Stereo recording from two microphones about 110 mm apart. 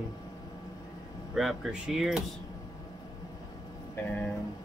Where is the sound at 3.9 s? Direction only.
15° left (ahead or behind).